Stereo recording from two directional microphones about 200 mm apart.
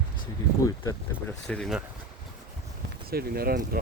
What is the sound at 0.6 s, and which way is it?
Speech, 15° left (ahead or behind).